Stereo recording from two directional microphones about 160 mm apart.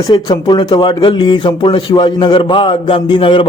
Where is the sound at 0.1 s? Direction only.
30° left (ahead or behind).